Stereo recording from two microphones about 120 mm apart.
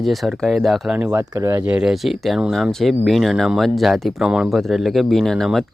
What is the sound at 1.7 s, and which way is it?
Speech, 5° right (ahead or behind).